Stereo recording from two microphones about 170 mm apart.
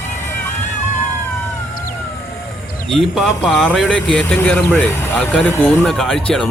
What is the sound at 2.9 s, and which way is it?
Speech, centre (ahead or behind).